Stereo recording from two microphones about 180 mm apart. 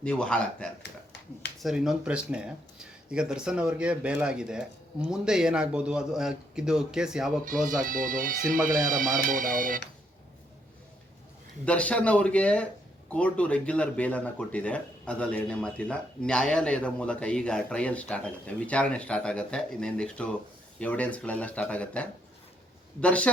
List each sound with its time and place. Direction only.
0.0 s speech: 5° left (ahead or behind)
7.7 s speech: 50° right (ahead or behind)
11.6 s speech: 5° left (ahead or behind)